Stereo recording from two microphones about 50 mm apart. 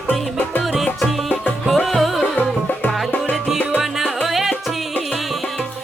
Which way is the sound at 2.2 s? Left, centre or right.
Left.